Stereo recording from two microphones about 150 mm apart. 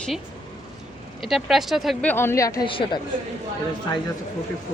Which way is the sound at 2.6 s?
35° left (ahead or behind).